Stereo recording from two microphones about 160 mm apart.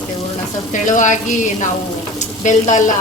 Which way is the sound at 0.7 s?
55° left (ahead or behind).